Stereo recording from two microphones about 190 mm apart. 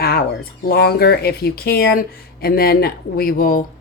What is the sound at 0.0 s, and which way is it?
Bird, 55° left (ahead or behind).